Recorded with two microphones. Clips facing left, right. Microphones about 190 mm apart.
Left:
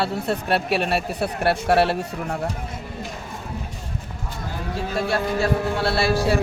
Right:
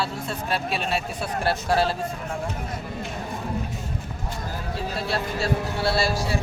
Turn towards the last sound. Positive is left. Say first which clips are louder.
# left 4 dB
turn(degrees=60)  # may be behind; listen again after turning